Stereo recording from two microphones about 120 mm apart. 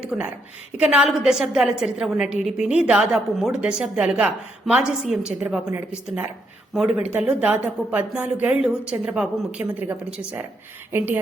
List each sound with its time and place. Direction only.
0.0 s a woman's voice: 10° right (ahead or behind)